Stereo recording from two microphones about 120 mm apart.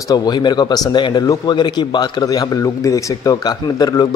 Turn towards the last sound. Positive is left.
turn(degrees=35)  # may be behind; listen again after turning